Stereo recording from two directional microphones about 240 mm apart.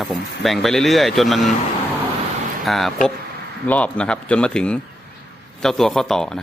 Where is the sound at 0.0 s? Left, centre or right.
Centre.